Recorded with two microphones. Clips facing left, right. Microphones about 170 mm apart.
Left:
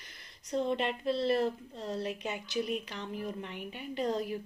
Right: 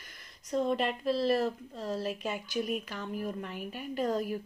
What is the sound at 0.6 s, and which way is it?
Speech, 25° left (ahead or behind).